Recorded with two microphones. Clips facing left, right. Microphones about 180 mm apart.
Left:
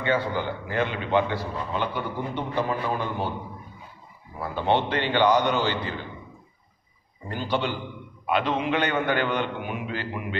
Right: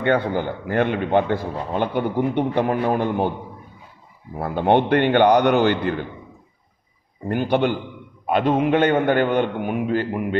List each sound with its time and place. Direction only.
0.0 s a man's voice: 55° right (ahead or behind)
7.2 s a man's voice: 55° right (ahead or behind)